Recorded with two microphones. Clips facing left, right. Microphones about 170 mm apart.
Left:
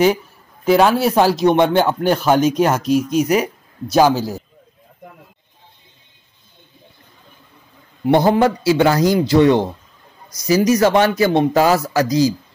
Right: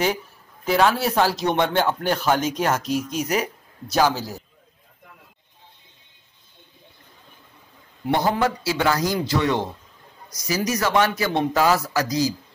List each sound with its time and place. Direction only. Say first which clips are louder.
0.7 s speech: left 6 dB; 15° left (ahead or behind)
8.1 s a man's voice: left 7 dB; 30° left (ahead or behind)